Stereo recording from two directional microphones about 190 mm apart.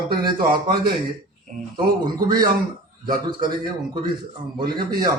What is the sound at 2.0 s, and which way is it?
Speech, 20° right (ahead or behind).